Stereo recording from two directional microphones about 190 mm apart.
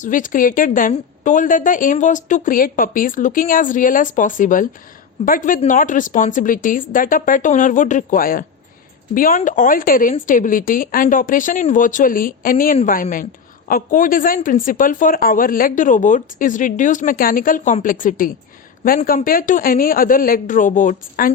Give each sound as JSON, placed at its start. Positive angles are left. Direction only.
{"t": 0.0, "sound": "a woman's voice", "side_deg": 45}